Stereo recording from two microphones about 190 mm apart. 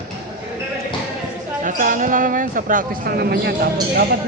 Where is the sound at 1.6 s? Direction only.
45° right (ahead or behind).